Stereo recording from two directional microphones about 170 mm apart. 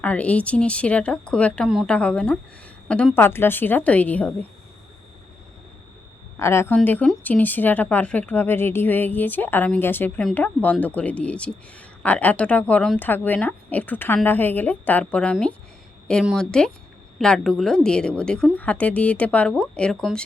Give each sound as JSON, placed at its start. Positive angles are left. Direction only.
{"t": 0.0, "sound": "speech", "side_deg": 10}
{"t": 6.4, "sound": "a woman's voice", "side_deg": 15}